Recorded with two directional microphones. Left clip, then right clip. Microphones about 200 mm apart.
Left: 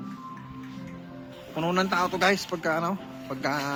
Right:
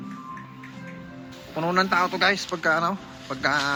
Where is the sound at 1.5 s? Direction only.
5° right (ahead or behind).